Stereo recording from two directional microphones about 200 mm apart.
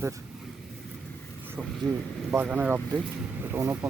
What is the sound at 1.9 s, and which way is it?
Speech, centre (ahead or behind).